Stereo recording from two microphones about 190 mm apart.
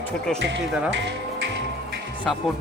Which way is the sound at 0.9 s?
75° right (ahead or behind).